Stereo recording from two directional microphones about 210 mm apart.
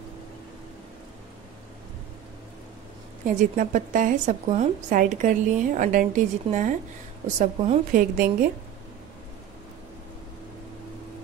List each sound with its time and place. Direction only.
3.3 s a woman's voice: 40° right (ahead or behind)